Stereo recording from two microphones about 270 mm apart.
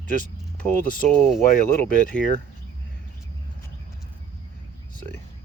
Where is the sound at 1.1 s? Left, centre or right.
Centre.